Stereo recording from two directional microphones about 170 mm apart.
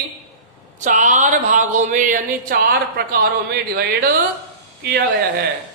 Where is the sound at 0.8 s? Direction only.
45° right (ahead or behind).